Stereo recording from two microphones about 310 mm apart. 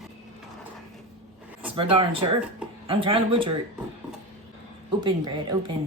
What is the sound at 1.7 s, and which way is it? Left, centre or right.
Speech, centre.